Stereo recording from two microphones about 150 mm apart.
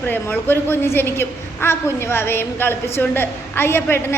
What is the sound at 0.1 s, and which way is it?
A woman's voice, 15° left (ahead or behind).